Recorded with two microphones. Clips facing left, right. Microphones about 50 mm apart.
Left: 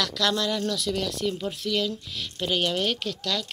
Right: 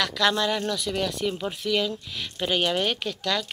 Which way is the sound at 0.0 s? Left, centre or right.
Right.